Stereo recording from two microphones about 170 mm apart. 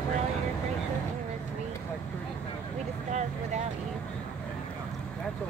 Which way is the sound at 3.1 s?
45° right (ahead or behind).